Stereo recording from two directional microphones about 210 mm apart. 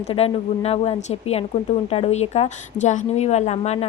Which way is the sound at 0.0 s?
30° left (ahead or behind).